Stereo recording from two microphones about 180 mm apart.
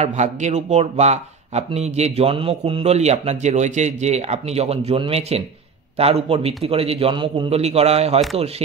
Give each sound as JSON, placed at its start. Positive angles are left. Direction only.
{"t": 0.0, "sound": "speech", "side_deg": -40}